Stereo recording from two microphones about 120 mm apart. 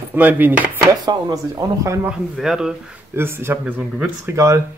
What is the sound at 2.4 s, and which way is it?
Speech, 5° right (ahead or behind).